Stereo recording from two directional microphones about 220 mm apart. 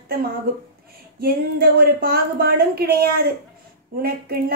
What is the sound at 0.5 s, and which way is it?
A woman's voice, 45° right (ahead or behind).